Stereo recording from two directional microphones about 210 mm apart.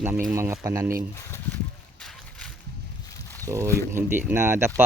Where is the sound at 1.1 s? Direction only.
10° left (ahead or behind).